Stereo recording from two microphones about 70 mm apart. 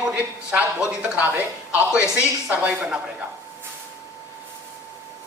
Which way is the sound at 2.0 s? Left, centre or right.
Left.